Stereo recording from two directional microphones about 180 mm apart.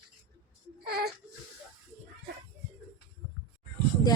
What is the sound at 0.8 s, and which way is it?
Speech, 60° right (ahead or behind).